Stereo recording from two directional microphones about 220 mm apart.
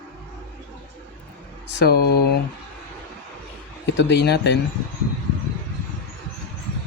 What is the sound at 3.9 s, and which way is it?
Speech, 50° left (ahead or behind).